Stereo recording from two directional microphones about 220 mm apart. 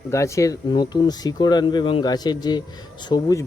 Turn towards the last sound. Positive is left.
turn(degrees=15)  # may be behind; listen again after turning